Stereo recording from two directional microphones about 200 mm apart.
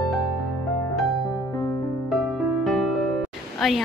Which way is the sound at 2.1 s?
Centre (ahead or behind).